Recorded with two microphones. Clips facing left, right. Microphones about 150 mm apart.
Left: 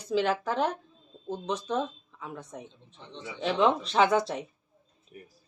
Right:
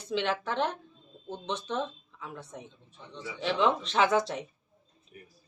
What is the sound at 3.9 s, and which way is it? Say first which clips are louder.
Speech: left 2 dB; 35° left (ahead or behind).